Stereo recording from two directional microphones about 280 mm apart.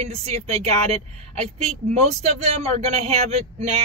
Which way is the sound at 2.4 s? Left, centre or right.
Right.